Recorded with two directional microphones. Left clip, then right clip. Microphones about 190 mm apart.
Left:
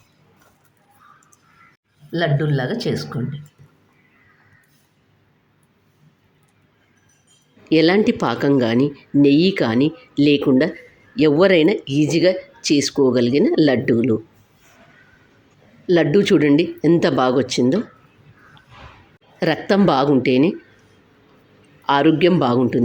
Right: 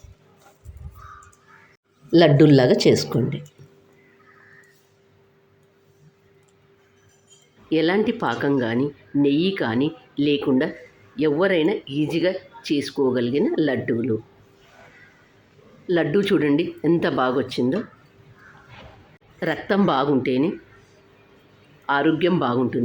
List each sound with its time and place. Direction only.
2.1 s speech: 25° right (ahead or behind)
7.7 s speech: 25° left (ahead or behind)
15.9 s speech: 20° left (ahead or behind)
19.4 s speech: 25° left (ahead or behind)
21.8 s speech: 25° left (ahead or behind)